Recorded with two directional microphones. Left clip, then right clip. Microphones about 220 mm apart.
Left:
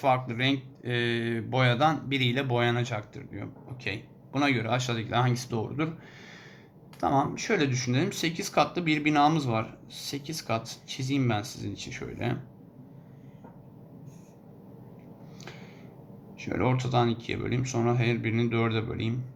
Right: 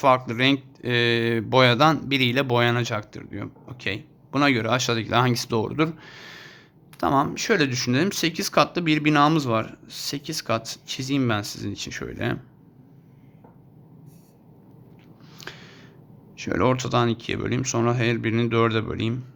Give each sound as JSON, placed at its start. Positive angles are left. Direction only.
{"t": 0.0, "sound": "speech", "side_deg": -50}
{"t": 15.4, "sound": "a sound", "side_deg": -50}
{"t": 16.4, "sound": "speech", "side_deg": -50}